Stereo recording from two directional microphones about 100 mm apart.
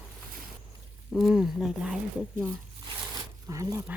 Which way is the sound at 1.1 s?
5° right (ahead or behind).